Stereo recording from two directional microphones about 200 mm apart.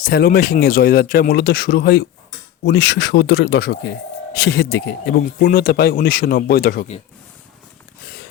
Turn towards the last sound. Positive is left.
turn(degrees=50)  # may be behind; listen again after turning